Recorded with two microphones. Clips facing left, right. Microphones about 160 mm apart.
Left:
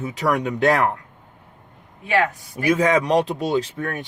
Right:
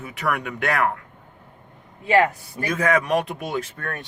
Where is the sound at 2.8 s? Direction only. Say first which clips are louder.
Left 1 dB; 25° left (ahead or behind).